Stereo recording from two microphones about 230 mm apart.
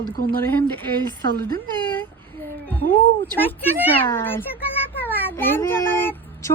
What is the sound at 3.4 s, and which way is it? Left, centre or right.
A woman's voice, centre.